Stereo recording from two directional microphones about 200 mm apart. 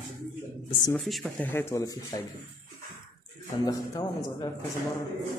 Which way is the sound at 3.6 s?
20° left (ahead or behind).